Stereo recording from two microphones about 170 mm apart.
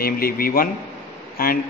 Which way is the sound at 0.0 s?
60° left (ahead or behind).